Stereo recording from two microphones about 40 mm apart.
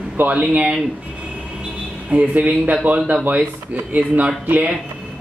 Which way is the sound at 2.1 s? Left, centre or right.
Right.